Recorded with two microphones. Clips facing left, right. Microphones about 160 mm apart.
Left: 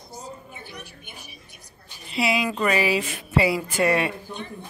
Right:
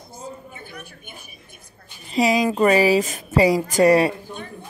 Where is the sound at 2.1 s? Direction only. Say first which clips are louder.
Right 5 dB; 40° right (ahead or behind).